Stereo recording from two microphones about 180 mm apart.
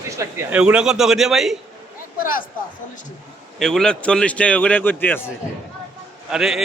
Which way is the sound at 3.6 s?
5° left (ahead or behind).